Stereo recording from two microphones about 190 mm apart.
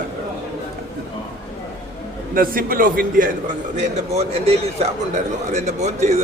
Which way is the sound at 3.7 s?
40° right (ahead or behind).